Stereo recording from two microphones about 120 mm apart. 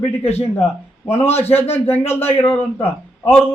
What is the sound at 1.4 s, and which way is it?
Speech, 20° left (ahead or behind).